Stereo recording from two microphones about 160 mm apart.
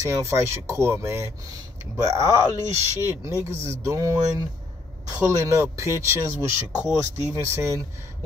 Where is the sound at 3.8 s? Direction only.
20° right (ahead or behind).